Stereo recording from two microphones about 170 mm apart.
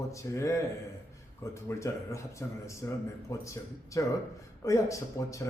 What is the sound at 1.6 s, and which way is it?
Speech, 15° left (ahead or behind).